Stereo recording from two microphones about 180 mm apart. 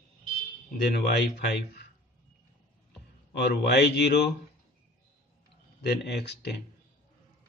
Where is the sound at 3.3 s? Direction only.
65° left (ahead or behind).